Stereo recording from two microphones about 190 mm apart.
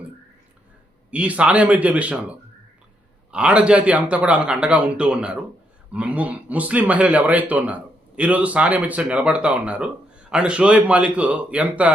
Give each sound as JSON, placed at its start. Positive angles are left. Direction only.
{"t": 1.1, "sound": "speech", "side_deg": -5}
{"t": 3.3, "sound": "speech", "side_deg": -5}